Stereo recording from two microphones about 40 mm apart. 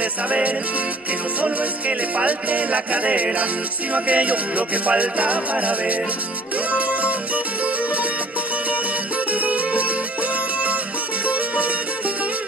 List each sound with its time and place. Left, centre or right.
1.4 s music: right
9.3 s music: right
11.2 s music: right